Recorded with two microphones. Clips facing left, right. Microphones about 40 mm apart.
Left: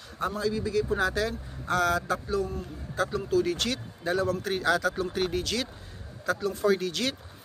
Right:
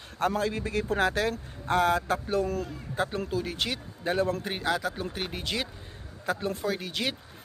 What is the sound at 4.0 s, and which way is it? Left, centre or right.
Speech, right.